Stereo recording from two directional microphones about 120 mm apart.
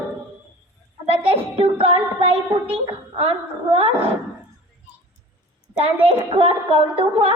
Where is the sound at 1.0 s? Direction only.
50° right (ahead or behind).